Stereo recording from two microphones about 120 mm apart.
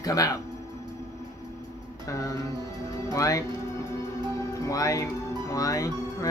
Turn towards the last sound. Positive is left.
turn(degrees=30)  # may be behind; listen again after turning